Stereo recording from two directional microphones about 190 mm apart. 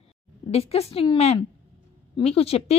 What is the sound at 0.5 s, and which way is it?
A woman's voice, 35° left (ahead or behind).